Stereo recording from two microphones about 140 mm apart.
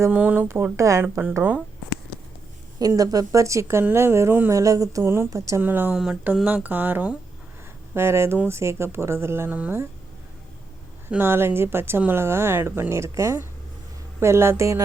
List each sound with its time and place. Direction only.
0.0 s speech: 10° right (ahead or behind)
2.7 s a woman's voice: 25° right (ahead or behind)
11.1 s a woman's voice: 15° right (ahead or behind)